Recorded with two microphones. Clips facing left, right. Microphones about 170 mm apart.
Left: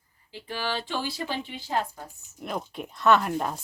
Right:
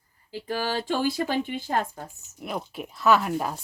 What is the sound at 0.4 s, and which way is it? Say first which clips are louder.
Speech: right 4 dB; 40° right (ahead or behind).